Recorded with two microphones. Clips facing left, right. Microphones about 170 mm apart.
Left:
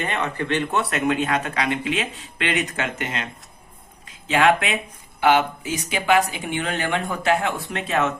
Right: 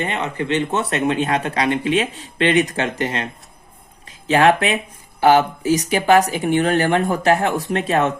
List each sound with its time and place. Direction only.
0.0 s speech: 20° right (ahead or behind)
4.3 s speech: 35° right (ahead or behind)